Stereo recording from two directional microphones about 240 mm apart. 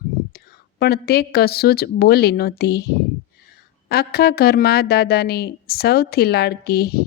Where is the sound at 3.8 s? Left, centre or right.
Left.